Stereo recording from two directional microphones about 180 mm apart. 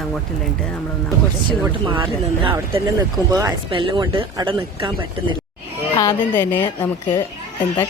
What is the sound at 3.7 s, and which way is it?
Speech, 30° right (ahead or behind).